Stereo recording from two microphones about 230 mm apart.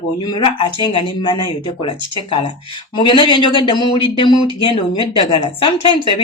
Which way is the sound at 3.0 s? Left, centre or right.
Left.